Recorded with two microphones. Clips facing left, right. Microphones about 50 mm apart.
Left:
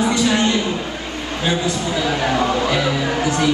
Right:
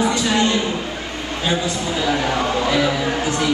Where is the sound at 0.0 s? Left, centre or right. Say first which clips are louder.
Left 2 dB; right.